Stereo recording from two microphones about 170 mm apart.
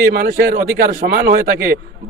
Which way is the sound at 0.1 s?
60° right (ahead or behind).